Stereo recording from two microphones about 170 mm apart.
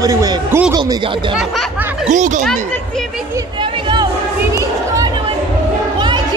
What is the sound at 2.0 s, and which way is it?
Speech, 45° right (ahead or behind).